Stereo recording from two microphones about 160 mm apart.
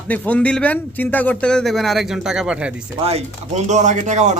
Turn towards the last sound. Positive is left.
turn(degrees=-45)  # may be behind; listen again after turning